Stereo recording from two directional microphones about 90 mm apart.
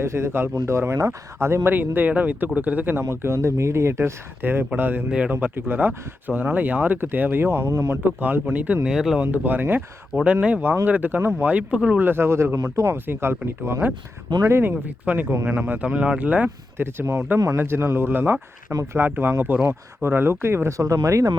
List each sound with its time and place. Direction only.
0.0 s speech: 30° right (ahead or behind); by 9.2 s 5° right (ahead or behind)
9.2 s speech: 20° right (ahead or behind)
12.5 s speech: 40° right (ahead or behind)